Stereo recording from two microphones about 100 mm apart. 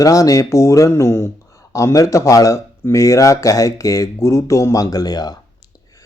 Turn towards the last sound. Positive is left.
turn(degrees=40)  # may be behind; listen again after turning